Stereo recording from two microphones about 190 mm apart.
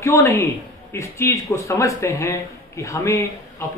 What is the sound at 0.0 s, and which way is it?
A man's voice, 15° left (ahead or behind).